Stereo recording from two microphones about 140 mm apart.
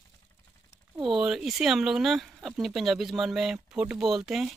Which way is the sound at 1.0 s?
5° right (ahead or behind).